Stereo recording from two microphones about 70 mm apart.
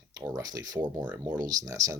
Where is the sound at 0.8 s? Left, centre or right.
Right.